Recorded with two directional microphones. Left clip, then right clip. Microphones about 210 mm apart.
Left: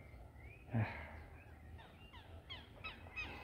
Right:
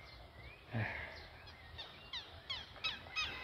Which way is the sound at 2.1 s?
55° right (ahead or behind).